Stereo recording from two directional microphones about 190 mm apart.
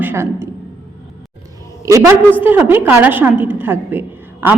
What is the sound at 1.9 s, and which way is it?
A man's voice, 15° right (ahead or behind).